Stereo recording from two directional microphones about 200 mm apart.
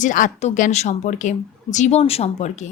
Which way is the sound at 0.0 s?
40° left (ahead or behind).